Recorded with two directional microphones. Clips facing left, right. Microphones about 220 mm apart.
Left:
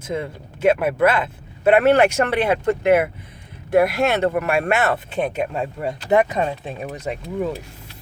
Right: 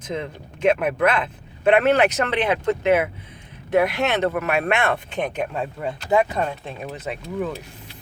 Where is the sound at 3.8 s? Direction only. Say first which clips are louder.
Left 3 dB; 45° left (ahead or behind).